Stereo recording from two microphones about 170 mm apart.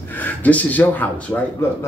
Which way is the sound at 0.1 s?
10° left (ahead or behind).